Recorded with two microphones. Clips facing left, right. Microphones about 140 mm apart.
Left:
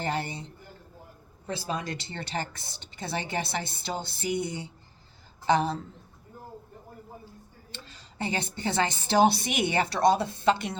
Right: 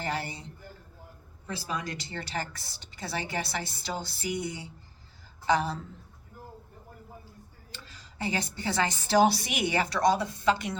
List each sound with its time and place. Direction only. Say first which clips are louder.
0.0 s a sound: left 3 dB; 25° left (ahead or behind)
1.5 s speech: left 2 dB; 25° left (ahead or behind)
7.7 s speech: left 3 dB; 25° left (ahead or behind)